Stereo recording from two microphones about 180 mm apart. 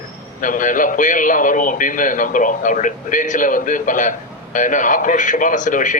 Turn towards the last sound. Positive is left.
turn(degrees=45)  # may be behind; listen again after turning